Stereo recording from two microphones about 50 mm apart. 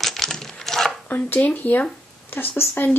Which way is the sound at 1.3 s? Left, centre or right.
Left.